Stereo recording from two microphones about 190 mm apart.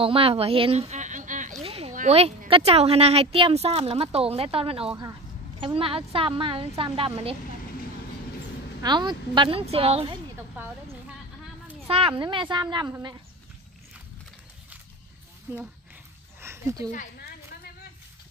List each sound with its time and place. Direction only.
0.0 s a woman's voice: 30° right (ahead or behind)
1.6 s a sound: 30° right (ahead or behind)
2.0 s a woman's voice: 35° right (ahead or behind)
8.8 s a woman's voice: 25° right (ahead or behind)
12.2 s a woman's voice: 25° right (ahead or behind)
15.5 s speech: 10° right (ahead or behind)
16.3 s a sound: 15° right (ahead or behind)